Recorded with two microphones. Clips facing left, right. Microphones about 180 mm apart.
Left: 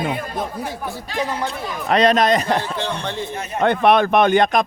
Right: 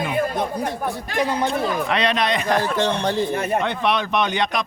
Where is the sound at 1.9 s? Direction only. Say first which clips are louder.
Left 10 dB; 45° left (ahead or behind).